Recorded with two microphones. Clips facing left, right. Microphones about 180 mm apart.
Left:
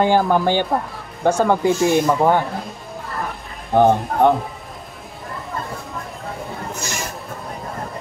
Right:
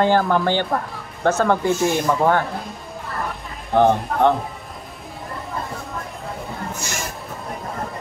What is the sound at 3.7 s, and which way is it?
Speech, 15° left (ahead or behind).